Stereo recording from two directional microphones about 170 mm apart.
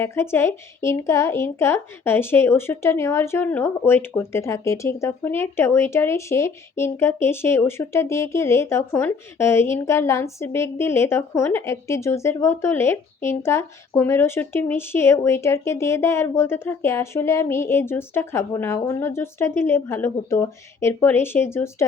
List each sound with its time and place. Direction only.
0.0 s speech: 15° left (ahead or behind)